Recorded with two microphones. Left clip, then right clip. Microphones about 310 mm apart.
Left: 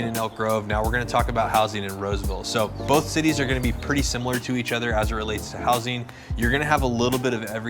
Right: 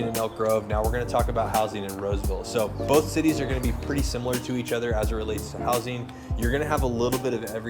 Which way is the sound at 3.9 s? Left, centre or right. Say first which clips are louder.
Left 3 dB; left.